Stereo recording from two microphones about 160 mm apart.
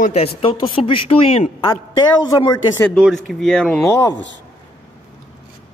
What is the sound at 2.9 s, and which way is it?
Speech, centre (ahead or behind).